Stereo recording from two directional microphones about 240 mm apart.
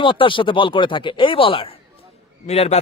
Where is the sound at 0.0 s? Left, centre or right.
Left.